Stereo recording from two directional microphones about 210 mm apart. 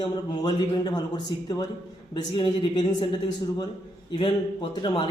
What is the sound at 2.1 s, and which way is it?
Speech, 20° left (ahead or behind).